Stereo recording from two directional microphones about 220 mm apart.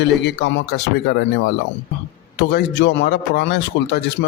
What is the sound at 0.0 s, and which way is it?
Speech, 50° left (ahead or behind).